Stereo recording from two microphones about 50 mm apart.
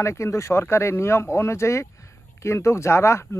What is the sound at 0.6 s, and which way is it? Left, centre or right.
Speech, left.